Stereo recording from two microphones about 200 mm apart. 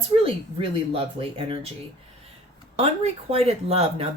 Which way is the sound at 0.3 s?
25° right (ahead or behind).